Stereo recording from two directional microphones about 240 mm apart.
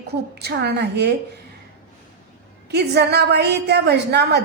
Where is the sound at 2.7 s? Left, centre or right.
Right.